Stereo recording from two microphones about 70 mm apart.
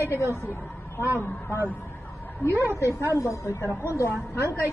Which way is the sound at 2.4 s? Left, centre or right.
Left.